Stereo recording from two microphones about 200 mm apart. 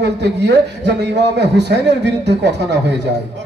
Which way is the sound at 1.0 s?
60° right (ahead or behind).